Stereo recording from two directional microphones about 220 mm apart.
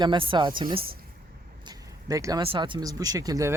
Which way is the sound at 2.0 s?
15° right (ahead or behind).